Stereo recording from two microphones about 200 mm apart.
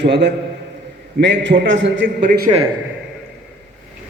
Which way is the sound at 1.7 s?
70° right (ahead or behind).